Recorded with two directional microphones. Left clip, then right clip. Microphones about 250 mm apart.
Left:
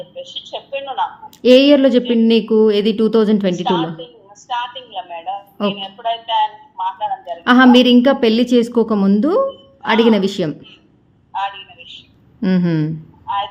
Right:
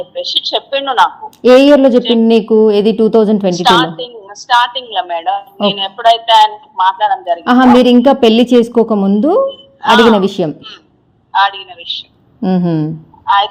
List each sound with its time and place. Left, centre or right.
0.5 s a woman's voice: right
1.4 s a woman's voice: centre
3.5 s a woman's voice: right
7.4 s a woman's voice: centre
11.3 s a woman's voice: right
12.4 s a woman's voice: centre
13.2 s speech: right